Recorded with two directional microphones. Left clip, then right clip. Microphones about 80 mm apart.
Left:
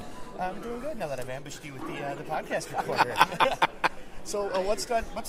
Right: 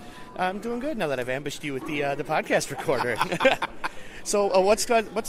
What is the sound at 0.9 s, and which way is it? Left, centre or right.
Speech, right.